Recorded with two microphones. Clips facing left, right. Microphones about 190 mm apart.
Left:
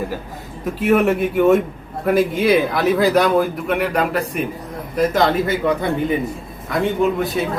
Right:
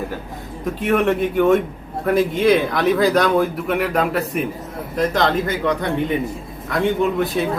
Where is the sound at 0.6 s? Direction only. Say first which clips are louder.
Left 2 dB; 5° left (ahead or behind).